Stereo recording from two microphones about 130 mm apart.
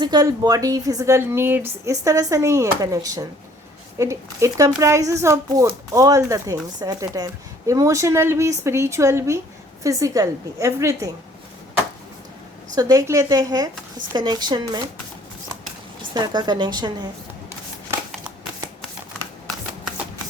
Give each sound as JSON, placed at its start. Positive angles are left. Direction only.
{"t": 0.0, "sound": "a woman's voice", "side_deg": -30}
{"t": 12.7, "sound": "a woman's voice", "side_deg": -30}
{"t": 16.1, "sound": "a woman's voice", "side_deg": -35}